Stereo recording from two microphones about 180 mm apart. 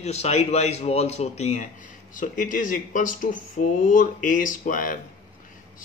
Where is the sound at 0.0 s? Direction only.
35° left (ahead or behind).